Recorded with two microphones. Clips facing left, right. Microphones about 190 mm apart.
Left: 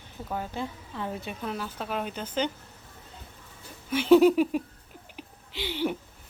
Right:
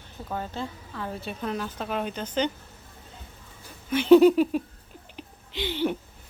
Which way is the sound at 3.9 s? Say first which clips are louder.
Right 3 dB; 5° left (ahead or behind).